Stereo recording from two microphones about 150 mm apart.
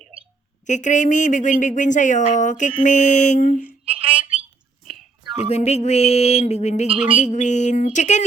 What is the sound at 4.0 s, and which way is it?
Speech, 35° right (ahead or behind).